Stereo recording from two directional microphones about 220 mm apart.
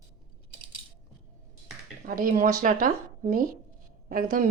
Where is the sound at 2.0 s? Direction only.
40° right (ahead or behind).